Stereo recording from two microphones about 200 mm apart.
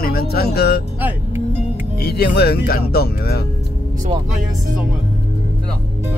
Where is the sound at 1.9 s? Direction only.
55° left (ahead or behind).